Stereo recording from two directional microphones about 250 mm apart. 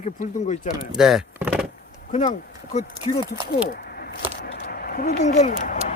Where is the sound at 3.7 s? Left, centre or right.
Left.